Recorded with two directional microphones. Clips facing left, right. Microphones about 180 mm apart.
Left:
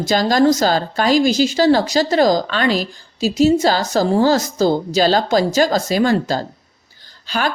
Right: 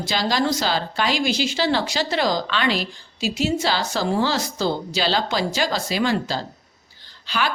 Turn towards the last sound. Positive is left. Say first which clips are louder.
# left 4 dB
turn(degrees=45)  # may be behind; listen again after turning